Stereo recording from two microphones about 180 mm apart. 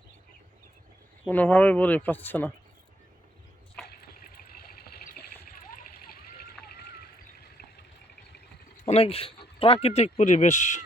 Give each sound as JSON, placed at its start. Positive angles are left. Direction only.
{"t": 1.3, "sound": "speech", "side_deg": 10}
{"t": 3.9, "sound": "a sound", "side_deg": 60}
{"t": 8.8, "sound": "speech", "side_deg": 35}